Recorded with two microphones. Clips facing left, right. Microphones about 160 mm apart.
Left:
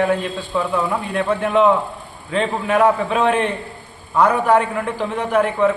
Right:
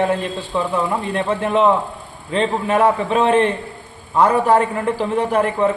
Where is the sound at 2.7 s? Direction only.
30° right (ahead or behind).